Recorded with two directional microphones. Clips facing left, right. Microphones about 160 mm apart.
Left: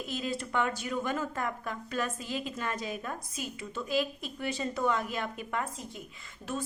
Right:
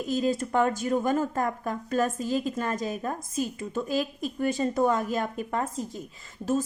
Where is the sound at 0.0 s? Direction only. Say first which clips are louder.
Right 8 dB; 45° right (ahead or behind).